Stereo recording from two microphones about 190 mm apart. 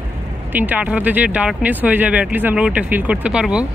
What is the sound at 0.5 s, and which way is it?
Speech, 10° right (ahead or behind).